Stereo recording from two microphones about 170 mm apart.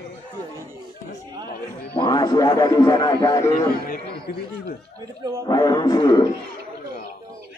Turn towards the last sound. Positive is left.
turn(degrees=25)  # may be behind; listen again after turning